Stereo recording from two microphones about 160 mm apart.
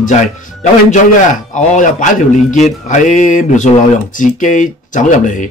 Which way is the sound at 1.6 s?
55° left (ahead or behind).